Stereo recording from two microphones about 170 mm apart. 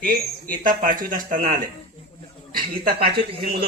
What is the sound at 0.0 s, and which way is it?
Speech, 55° right (ahead or behind).